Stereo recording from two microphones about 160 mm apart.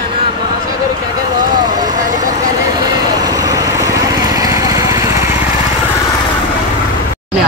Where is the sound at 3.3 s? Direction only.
20° right (ahead or behind).